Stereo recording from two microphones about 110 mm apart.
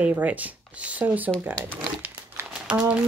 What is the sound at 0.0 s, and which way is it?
Speech, 15° right (ahead or behind).